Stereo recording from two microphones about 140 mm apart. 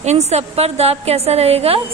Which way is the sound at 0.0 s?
50° right (ahead or behind).